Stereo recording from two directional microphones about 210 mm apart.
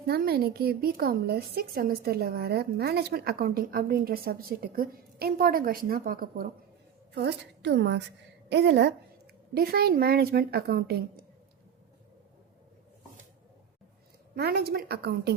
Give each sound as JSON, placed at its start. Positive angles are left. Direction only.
{"t": 0.1, "sound": "a woman's voice", "side_deg": -45}
{"t": 7.1, "sound": "a woman's voice", "side_deg": -55}
{"t": 14.3, "sound": "a woman's voice", "side_deg": -50}